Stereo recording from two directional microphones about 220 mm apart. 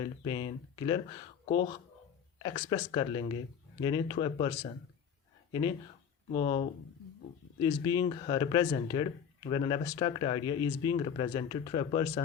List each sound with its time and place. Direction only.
0.0 s speech: 20° left (ahead or behind)
2.4 s speech: 20° left (ahead or behind)